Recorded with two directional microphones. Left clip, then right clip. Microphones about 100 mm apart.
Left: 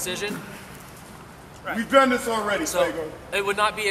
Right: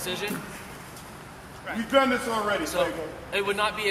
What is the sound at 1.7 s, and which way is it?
A man's voice, 40° left (ahead or behind).